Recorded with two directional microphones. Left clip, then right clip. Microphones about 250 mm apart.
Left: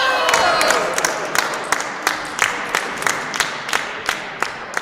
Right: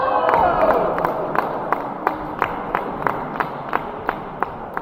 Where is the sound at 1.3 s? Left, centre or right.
Left.